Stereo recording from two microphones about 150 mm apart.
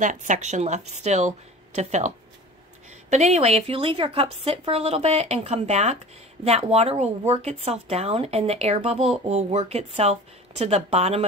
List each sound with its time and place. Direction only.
0.0 s speech: 55° right (ahead or behind)